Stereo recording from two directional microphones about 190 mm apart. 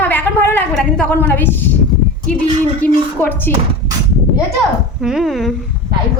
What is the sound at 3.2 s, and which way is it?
Speech, 10° left (ahead or behind).